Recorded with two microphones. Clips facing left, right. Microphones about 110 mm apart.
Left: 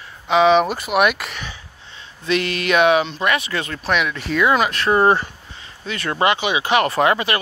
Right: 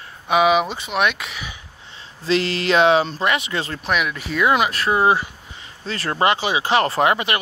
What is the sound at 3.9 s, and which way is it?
Speech, 5° right (ahead or behind).